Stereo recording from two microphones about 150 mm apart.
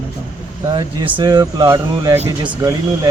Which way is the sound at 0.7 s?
35° right (ahead or behind).